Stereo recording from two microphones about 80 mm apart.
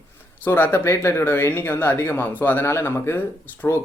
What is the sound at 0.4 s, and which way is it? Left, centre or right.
Speech, left.